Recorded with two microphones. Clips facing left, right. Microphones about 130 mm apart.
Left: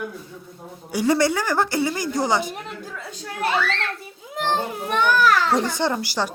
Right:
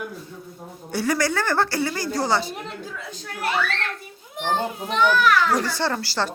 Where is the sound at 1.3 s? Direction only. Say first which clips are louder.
Left 1 dB; 15° left (ahead or behind).